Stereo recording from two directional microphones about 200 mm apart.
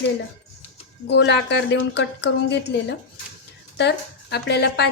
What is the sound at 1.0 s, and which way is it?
A woman's voice, 60° left (ahead or behind).